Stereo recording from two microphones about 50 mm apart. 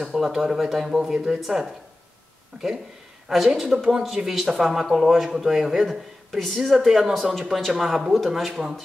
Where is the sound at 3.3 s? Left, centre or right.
Centre.